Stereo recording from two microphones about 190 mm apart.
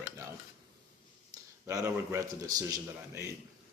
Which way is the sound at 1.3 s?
15° right (ahead or behind).